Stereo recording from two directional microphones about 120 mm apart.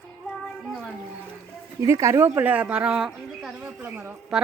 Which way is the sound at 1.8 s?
25° right (ahead or behind).